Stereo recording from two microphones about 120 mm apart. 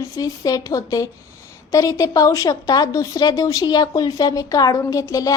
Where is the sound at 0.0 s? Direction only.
30° left (ahead or behind).